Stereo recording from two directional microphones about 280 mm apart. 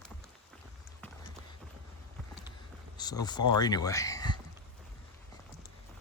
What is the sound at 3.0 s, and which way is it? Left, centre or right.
Speech, centre.